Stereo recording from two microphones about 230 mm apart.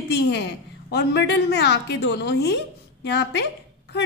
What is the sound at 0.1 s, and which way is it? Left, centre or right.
A woman's voice, left.